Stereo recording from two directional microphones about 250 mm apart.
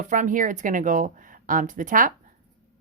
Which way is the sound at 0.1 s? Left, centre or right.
Right.